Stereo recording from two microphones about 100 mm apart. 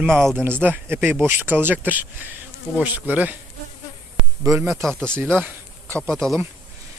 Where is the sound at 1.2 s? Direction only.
20° right (ahead or behind).